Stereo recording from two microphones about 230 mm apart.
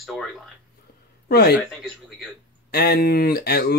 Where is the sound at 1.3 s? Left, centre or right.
Left.